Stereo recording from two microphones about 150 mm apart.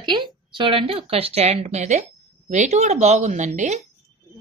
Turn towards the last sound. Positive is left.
turn(degrees=-50)  # may be behind; listen again after turning